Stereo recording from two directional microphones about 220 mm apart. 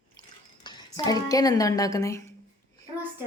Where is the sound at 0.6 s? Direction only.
15° left (ahead or behind).